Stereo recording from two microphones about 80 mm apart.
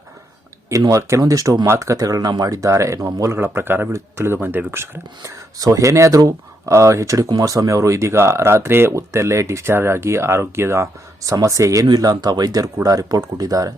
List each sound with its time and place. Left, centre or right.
0.9 s speech: right
3.3 s speech: right
5.5 s speech: right
7.3 s speech: right
11.4 s speech: right